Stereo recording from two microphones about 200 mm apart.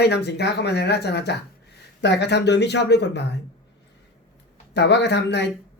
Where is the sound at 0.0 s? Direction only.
55° left (ahead or behind).